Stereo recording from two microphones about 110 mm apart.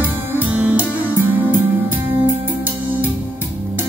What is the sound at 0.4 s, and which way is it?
Music, 15° right (ahead or behind).